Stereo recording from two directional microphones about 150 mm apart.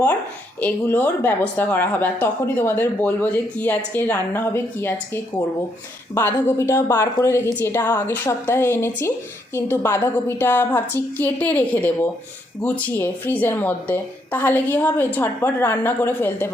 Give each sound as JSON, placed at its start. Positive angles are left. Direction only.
{"t": 0.6, "sound": "speech", "side_deg": 10}